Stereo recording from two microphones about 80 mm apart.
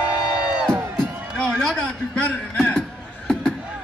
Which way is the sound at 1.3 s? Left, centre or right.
Centre.